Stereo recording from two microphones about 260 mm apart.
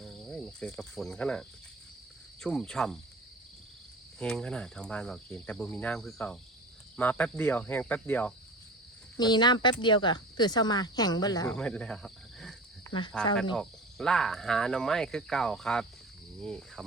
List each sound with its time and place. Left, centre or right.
0.0 s cricket: centre
4.2 s cricket: centre
9.1 s speech: centre
11.5 s cricket: centre